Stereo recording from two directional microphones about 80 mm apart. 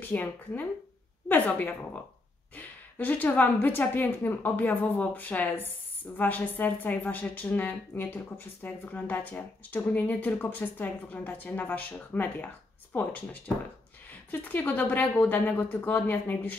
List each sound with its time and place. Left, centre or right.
0.0 s a woman's voice: left